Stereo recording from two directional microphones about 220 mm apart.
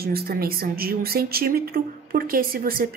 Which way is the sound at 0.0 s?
45° right (ahead or behind).